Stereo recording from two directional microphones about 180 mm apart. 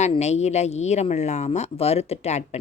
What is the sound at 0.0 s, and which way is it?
A woman's voice, 40° left (ahead or behind).